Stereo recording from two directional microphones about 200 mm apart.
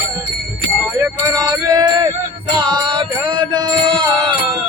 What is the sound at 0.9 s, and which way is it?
Music, 15° right (ahead or behind).